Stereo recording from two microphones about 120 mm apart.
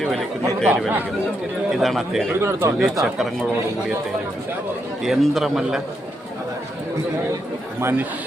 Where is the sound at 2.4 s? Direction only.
20° right (ahead or behind).